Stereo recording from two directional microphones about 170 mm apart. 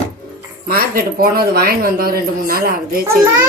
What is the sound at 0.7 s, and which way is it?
Speech, 60° right (ahead or behind).